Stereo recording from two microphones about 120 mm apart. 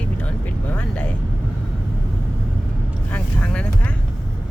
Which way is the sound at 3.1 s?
10° left (ahead or behind).